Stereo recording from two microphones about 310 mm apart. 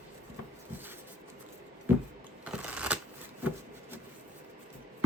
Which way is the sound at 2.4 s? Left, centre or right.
Centre.